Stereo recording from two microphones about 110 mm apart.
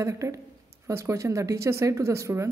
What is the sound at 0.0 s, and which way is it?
Speech, 30° right (ahead or behind).